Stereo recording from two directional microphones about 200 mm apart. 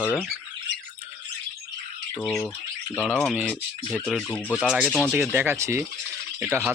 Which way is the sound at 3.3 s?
10° right (ahead or behind).